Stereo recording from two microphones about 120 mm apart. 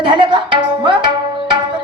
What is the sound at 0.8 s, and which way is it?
Tabla, 40° right (ahead or behind).